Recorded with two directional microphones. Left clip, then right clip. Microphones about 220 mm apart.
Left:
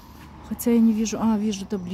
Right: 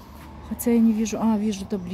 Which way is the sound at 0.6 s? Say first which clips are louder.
Even; 10° left (ahead or behind).